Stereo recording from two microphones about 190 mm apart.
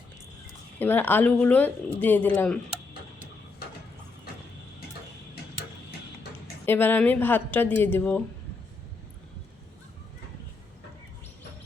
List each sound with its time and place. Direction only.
0.8 s speech: 10° left (ahead or behind)
6.7 s speech: 10° left (ahead or behind)